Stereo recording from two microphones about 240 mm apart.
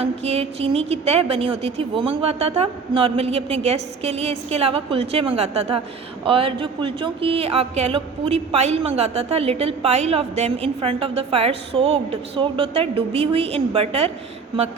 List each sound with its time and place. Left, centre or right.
0.0 s a woman's voice: right